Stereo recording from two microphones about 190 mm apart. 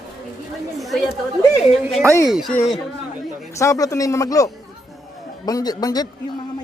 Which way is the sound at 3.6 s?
20° left (ahead or behind).